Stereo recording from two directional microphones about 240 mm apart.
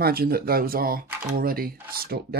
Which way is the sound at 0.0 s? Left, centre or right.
Right.